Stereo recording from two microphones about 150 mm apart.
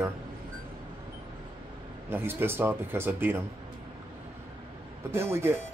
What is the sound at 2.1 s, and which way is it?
Speech, 15° right (ahead or behind).